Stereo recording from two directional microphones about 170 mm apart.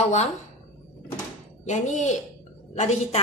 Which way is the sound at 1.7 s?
45° left (ahead or behind).